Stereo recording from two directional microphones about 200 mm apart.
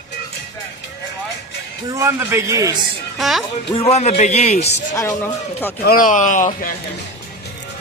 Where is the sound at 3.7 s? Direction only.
30° left (ahead or behind).